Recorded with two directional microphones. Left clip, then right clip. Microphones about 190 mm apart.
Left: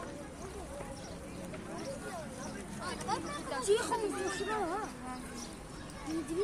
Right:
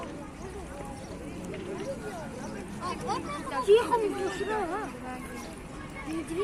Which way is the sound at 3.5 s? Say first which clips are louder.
Right 9 dB; 55° left (ahead or behind).